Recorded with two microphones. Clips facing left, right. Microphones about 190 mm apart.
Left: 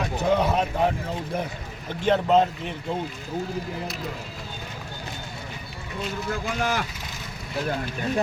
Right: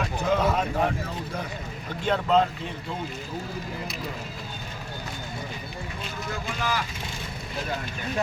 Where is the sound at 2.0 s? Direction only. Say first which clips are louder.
Left 3 dB; 20° left (ahead or behind).